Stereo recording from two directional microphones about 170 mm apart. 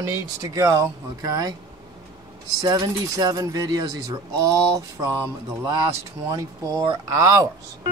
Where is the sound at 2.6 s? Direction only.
25° right (ahead or behind).